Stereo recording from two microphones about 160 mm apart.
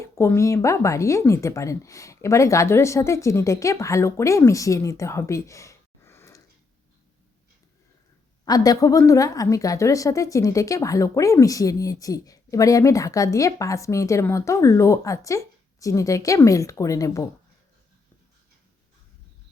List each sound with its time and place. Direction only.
0.0 s a woman's voice: 15° left (ahead or behind)
8.4 s a woman's voice: 25° left (ahead or behind)